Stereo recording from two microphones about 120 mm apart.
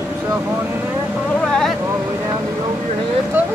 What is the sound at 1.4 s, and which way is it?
Vehicle, 5° left (ahead or behind).